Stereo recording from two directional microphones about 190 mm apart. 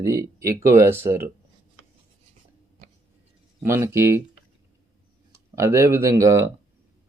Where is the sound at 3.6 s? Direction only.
15° right (ahead or behind).